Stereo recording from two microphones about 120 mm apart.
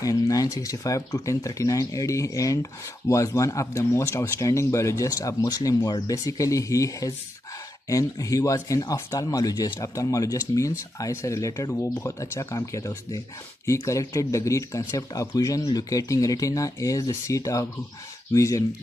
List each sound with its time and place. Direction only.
0.0 s speech: 30° left (ahead or behind)